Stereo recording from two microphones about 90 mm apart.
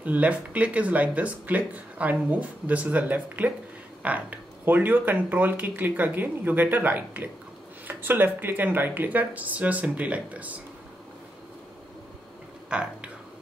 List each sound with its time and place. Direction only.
0.0 s speech: 15° right (ahead or behind)
12.6 s speech: 10° right (ahead or behind)